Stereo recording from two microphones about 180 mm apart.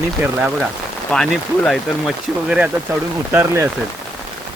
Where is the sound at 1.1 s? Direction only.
5° left (ahead or behind).